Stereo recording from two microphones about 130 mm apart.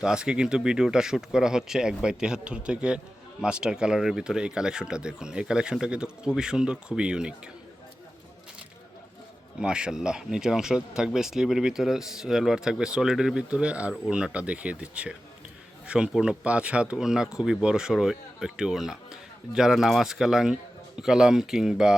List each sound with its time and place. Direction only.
0.0 s speech: 5° right (ahead or behind)
9.6 s speech: 5° right (ahead or behind)